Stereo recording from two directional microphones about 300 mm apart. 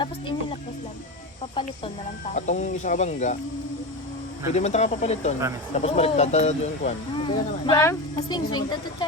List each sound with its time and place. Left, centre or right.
1.5 s speech: centre
4.5 s speech: left